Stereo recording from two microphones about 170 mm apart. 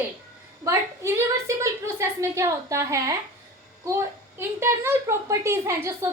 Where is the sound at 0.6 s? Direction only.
15° right (ahead or behind).